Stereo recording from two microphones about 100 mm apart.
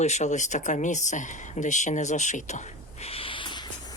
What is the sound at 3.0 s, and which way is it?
Owl, 75° left (ahead or behind).